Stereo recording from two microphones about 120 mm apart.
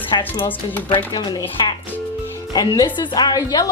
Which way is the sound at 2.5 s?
35° left (ahead or behind).